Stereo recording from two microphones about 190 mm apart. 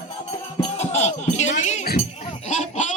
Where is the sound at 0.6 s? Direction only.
35° left (ahead or behind).